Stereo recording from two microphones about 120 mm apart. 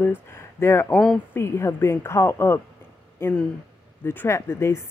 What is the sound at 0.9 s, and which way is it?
Speech, 5° left (ahead or behind).